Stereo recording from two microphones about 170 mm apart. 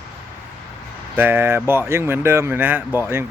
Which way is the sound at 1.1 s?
10° right (ahead or behind).